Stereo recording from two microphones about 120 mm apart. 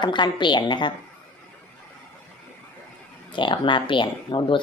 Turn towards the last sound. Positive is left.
turn(degrees=40)  # may be behind; listen again after turning